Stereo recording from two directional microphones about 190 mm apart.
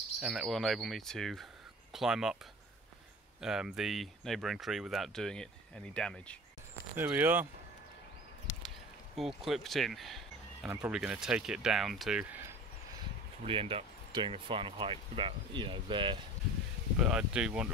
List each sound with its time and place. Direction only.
0.2 s speech: 5° right (ahead or behind)
3.3 s speech: 5° right (ahead or behind)
6.7 s speech: 10° right (ahead or behind)
8.6 s a sound: centre (ahead or behind)
10.7 s speech: 5° right (ahead or behind)
13.4 s speech: 30° right (ahead or behind)
17.0 s speech: 5° right (ahead or behind)